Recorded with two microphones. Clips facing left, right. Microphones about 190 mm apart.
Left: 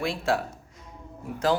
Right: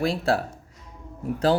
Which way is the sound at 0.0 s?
35° right (ahead or behind).